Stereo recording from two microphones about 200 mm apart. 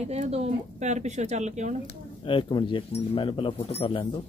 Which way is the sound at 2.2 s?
25° left (ahead or behind).